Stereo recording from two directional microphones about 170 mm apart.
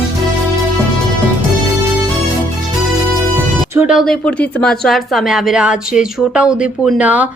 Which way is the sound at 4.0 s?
5° left (ahead or behind).